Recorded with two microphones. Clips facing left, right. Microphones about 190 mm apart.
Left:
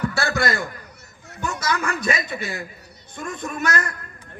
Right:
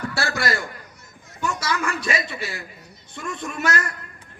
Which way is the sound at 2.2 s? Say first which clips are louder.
Left 3 dB; 50° left (ahead or behind).